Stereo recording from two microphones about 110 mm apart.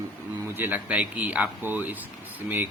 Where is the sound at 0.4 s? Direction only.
20° right (ahead or behind).